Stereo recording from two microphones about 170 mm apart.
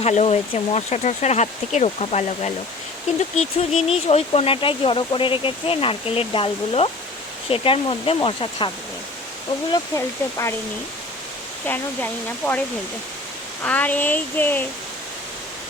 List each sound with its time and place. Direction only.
0.0 s speech: 40° left (ahead or behind)
9.7 s speech: 20° left (ahead or behind)
13.6 s speech: 10° left (ahead or behind)